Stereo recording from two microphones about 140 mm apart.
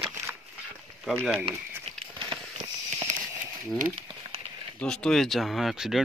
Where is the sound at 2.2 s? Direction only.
35° right (ahead or behind).